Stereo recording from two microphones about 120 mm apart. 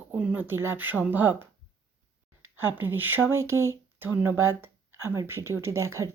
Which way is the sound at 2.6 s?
15° right (ahead or behind).